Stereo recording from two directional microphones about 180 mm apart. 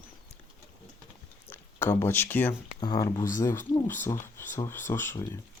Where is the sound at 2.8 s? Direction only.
20° left (ahead or behind).